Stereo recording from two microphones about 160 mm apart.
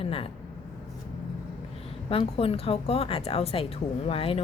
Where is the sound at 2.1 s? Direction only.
35° left (ahead or behind).